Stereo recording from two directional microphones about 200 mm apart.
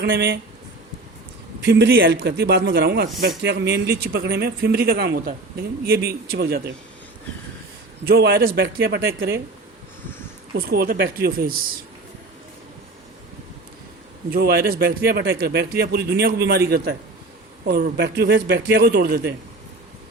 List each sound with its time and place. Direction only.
0.0 s a man's voice: 60° right (ahead or behind)
1.6 s a man's voice: 60° right (ahead or behind)
8.0 s a man's voice: 50° right (ahead or behind)
10.5 s a man's voice: 50° right (ahead or behind)
14.3 s a man's voice: 50° right (ahead or behind)